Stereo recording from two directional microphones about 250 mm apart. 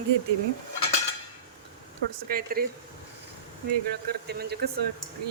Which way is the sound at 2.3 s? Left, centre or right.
Right.